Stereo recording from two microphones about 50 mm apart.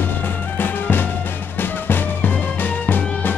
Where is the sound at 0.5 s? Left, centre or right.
Left.